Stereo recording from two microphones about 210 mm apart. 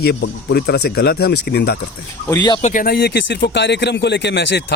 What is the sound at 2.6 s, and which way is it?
Speech, 40° left (ahead or behind).